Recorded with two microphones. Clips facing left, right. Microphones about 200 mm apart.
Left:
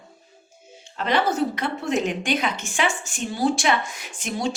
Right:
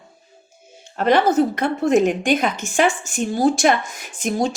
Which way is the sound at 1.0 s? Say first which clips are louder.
Right 6 dB; 50° right (ahead or behind).